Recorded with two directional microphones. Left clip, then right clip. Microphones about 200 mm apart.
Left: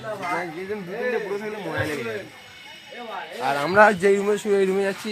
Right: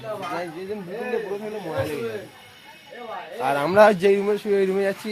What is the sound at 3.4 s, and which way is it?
Speech, 30° right (ahead or behind).